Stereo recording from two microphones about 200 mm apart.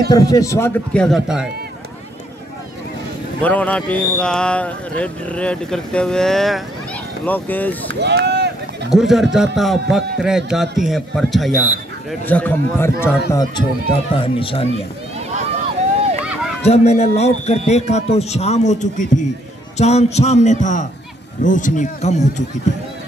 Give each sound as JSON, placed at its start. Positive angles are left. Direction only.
{"t": 0.1, "sound": "speech", "side_deg": 15}
{"t": 3.3, "sound": "speech", "side_deg": 5}
{"t": 7.9, "sound": "speech", "side_deg": -55}
{"t": 8.9, "sound": "speech", "side_deg": 0}
{"t": 16.6, "sound": "a man's voice", "side_deg": 30}